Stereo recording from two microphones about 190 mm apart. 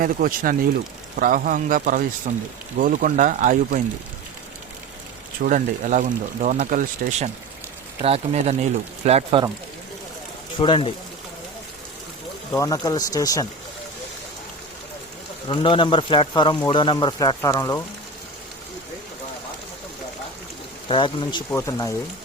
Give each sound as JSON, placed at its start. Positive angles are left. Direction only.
{"t": 0.0, "sound": "speech", "side_deg": -45}
{"t": 5.4, "sound": "speech", "side_deg": -45}
{"t": 8.0, "sound": "speech", "side_deg": -35}
{"t": 10.6, "sound": "a man's voice", "side_deg": 25}
{"t": 12.5, "sound": "a man's voice", "side_deg": 20}
{"t": 15.4, "sound": "a man's voice", "side_deg": 25}
{"t": 20.8, "sound": "a man's voice", "side_deg": 25}